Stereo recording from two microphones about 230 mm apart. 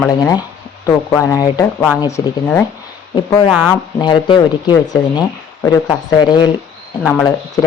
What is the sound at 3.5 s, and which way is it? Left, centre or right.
Speech, centre.